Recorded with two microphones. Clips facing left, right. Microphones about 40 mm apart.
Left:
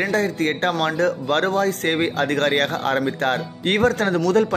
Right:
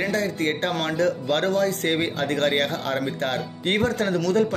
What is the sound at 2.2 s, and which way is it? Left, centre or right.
Speech, left.